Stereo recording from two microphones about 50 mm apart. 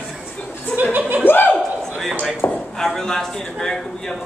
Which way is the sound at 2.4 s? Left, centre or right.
Left.